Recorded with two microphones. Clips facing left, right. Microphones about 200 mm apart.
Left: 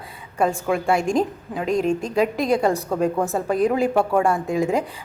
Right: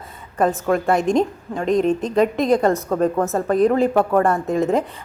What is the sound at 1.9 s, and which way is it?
Speech, 35° right (ahead or behind).